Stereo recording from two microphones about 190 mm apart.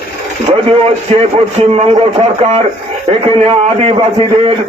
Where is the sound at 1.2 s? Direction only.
35° right (ahead or behind).